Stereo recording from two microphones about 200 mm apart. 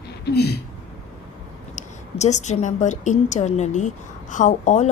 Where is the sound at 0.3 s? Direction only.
55° left (ahead or behind).